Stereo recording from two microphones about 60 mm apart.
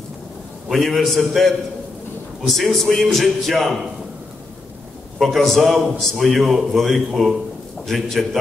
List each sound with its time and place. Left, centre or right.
0.7 s a man's voice: centre
5.2 s a man's voice: centre